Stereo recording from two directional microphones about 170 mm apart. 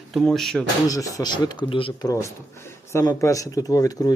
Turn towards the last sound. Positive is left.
turn(degrees=20)  # may be behind; listen again after turning